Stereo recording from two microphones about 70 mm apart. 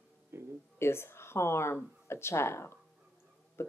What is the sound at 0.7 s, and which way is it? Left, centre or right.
Speech, left.